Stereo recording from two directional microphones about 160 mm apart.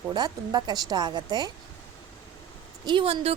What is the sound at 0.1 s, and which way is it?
Speech, 25° right (ahead or behind).